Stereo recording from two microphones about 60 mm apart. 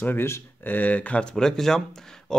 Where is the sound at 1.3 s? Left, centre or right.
Centre.